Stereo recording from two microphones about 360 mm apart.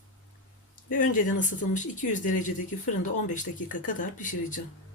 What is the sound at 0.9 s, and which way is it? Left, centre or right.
Speech, left.